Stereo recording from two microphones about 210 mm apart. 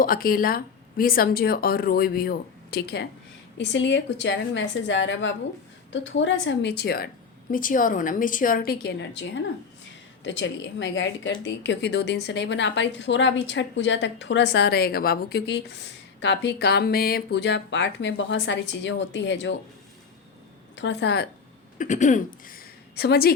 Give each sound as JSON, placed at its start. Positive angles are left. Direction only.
{"t": 0.0, "sound": "a woman's voice", "side_deg": 45}
{"t": 20.7, "sound": "speech", "side_deg": 55}
{"t": 21.8, "sound": "a woman's voice", "side_deg": 35}